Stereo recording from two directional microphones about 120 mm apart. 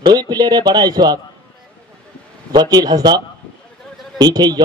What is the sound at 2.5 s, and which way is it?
Speech, 35° right (ahead or behind).